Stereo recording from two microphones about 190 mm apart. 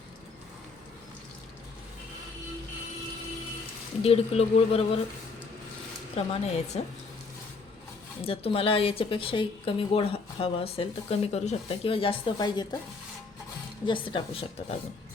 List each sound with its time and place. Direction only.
4.0 s speech: 30° left (ahead or behind)
6.1 s speech: 30° left (ahead or behind)
8.2 s a woman's voice: 30° left (ahead or behind)
13.8 s a woman's voice: 25° left (ahead or behind)